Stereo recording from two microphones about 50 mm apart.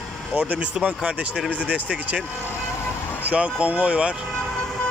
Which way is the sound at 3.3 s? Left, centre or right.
Right.